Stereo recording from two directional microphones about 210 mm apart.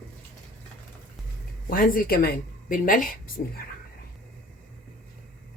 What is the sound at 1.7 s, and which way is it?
Speech, 40° left (ahead or behind).